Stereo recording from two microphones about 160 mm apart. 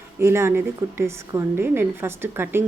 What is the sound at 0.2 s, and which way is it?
A woman's voice, 15° right (ahead or behind).